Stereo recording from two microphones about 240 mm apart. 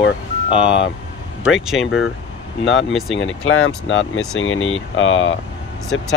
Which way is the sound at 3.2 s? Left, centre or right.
Left.